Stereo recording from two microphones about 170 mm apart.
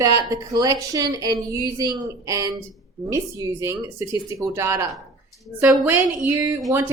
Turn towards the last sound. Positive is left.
turn(degrees=-20)  # may be behind; listen again after turning